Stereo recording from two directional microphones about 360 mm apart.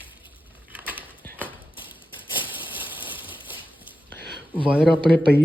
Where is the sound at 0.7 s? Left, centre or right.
Centre.